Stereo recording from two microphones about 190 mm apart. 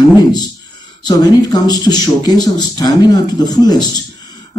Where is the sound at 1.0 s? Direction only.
20° left (ahead or behind).